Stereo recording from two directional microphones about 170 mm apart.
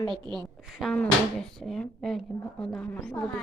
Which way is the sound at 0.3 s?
Centre (ahead or behind).